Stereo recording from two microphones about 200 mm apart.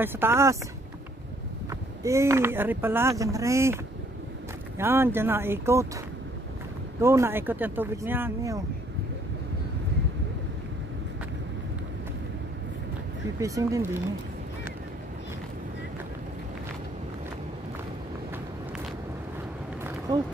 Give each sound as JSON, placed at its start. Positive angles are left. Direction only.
{"t": 0.0, "sound": "speech", "side_deg": -10}
{"t": 1.7, "sound": "speech", "side_deg": -15}
{"t": 7.0, "sound": "speech", "side_deg": -15}
{"t": 13.4, "sound": "speech", "side_deg": -15}
{"t": 20.1, "sound": "speech", "side_deg": -20}